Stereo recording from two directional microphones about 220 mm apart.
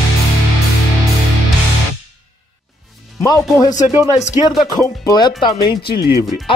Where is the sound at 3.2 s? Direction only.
15° left (ahead or behind).